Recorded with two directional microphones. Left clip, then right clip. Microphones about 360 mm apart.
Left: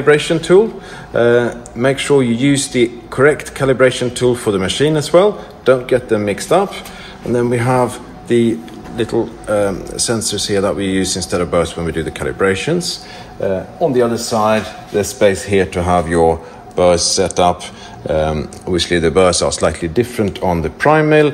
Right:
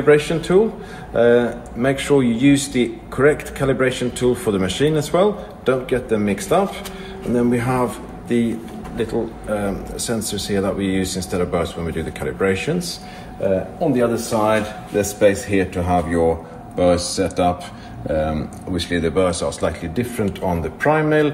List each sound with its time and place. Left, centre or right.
0.0 s a man's voice: left
8.9 s a man's voice: left
13.9 s a man's voice: left